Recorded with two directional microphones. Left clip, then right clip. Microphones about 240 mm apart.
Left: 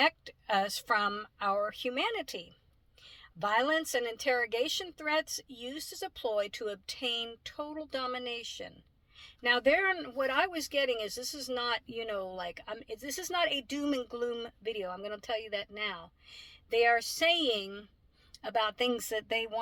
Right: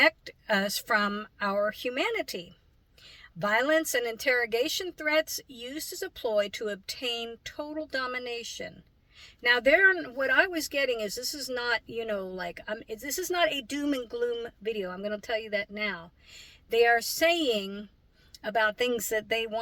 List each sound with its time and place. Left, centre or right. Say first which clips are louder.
0.0 s speech: right 5 dB; left
17.2 s speech: right 3 dB; left